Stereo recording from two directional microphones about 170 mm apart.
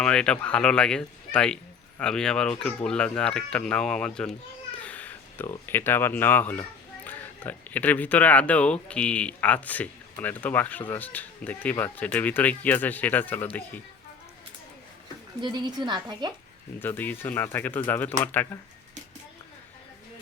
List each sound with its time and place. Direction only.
0.0 s speech: 5° left (ahead or behind)
15.4 s a woman's voice: 25° right (ahead or behind)
16.8 s speech: 10° left (ahead or behind)